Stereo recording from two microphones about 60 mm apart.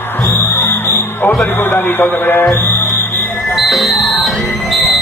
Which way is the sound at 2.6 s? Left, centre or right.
Left.